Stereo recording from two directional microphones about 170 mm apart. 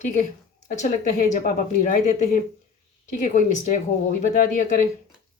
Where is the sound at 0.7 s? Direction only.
45° left (ahead or behind).